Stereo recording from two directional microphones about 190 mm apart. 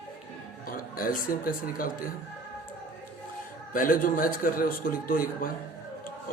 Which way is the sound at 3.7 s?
45° left (ahead or behind).